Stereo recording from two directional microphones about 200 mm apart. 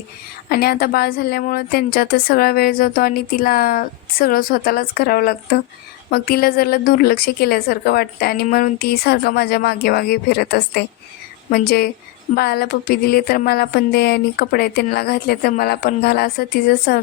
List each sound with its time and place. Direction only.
0.4 s speech: 50° left (ahead or behind)